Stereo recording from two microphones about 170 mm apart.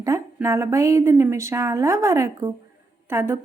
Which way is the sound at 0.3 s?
15° right (ahead or behind).